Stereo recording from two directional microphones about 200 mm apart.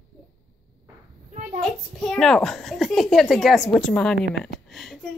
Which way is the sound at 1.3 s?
40° right (ahead or behind).